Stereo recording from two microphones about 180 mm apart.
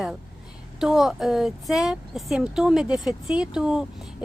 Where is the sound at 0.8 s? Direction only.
Centre (ahead or behind).